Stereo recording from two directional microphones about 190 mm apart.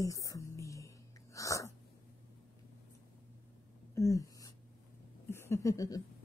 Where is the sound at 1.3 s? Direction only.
15° left (ahead or behind).